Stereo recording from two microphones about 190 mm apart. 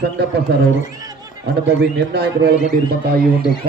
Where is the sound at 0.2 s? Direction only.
60° right (ahead or behind).